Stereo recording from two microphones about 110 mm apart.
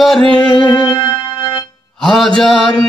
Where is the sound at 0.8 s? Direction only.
45° left (ahead or behind).